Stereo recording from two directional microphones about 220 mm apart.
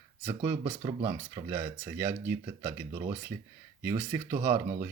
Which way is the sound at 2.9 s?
25° right (ahead or behind).